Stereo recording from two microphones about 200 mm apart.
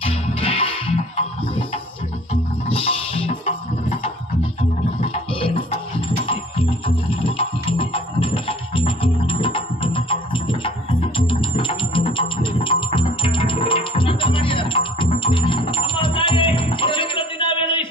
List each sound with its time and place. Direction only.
0.0 s music: 30° left (ahead or behind)
2.6 s music: 30° left (ahead or behind)